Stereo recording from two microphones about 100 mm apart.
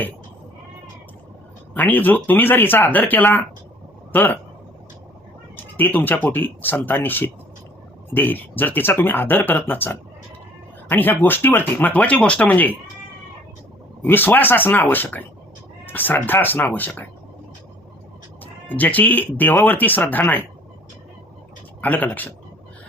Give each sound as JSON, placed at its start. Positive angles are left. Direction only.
{"t": 1.7, "sound": "speech", "side_deg": 15}
{"t": 5.5, "sound": "speech", "side_deg": 20}
{"t": 14.0, "sound": "speech", "side_deg": 20}
{"t": 18.7, "sound": "speech", "side_deg": 15}
{"t": 21.8, "sound": "speech", "side_deg": 15}